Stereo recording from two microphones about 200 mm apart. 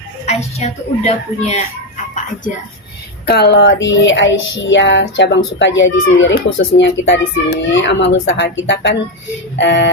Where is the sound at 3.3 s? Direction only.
60° left (ahead or behind).